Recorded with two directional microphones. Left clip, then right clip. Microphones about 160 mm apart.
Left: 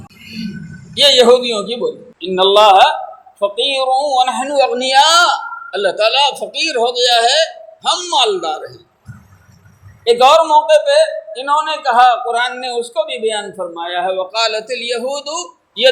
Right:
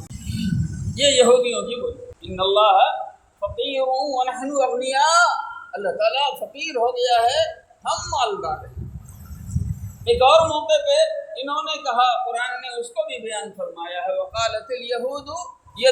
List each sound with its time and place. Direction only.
0.9 s a man's voice: 45° left (ahead or behind)
10.0 s a man's voice: 45° left (ahead or behind)